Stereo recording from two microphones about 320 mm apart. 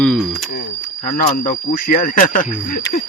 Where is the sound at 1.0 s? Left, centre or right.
Left.